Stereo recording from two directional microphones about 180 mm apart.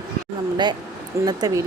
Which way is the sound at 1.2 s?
20° right (ahead or behind).